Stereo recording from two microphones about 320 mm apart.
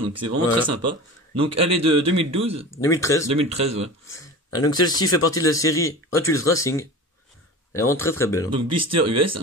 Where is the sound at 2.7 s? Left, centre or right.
Centre.